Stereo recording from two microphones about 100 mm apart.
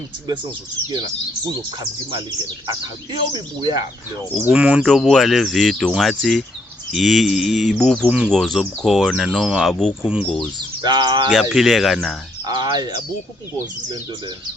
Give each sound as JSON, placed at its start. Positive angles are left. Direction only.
{"t": 2.6, "sound": "speech", "side_deg": -50}
{"t": 4.4, "sound": "speech", "side_deg": -10}
{"t": 4.9, "sound": "speech", "side_deg": 5}
{"t": 8.0, "sound": "speech", "side_deg": -10}
{"t": 8.3, "sound": "speech", "side_deg": 5}
{"t": 9.7, "sound": "speech", "side_deg": 5}
{"t": 10.8, "sound": "speech", "side_deg": -45}
{"t": 11.3, "sound": "speech", "side_deg": 0}
{"t": 12.5, "sound": "speech", "side_deg": -45}